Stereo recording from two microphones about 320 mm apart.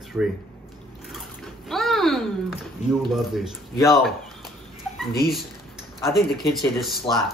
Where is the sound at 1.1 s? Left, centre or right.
Centre.